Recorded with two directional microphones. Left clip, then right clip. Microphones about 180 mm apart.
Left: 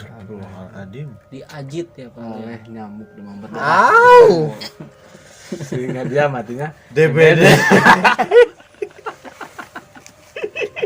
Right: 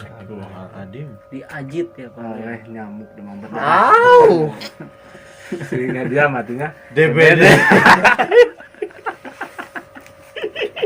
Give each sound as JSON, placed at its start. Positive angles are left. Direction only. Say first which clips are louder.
{"t": 2.2, "sound": "a man's voice", "louder": "right 3 dB", "side_deg": 50}
{"t": 5.8, "sound": "a man's voice", "louder": "right 1 dB", "side_deg": 50}
{"t": 10.3, "sound": "a sound", "louder": "even", "side_deg": 45}